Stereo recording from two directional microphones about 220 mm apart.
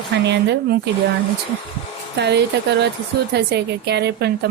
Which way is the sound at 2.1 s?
50° right (ahead or behind).